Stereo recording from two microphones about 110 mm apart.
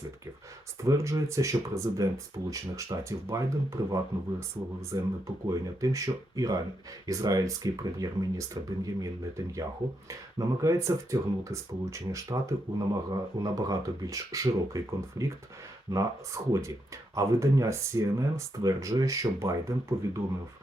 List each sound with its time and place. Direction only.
0.8 s speech: 25° right (ahead or behind)
10.1 s speech: 30° right (ahead or behind)